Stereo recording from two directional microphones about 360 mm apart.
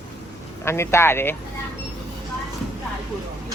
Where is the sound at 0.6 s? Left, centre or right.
Centre.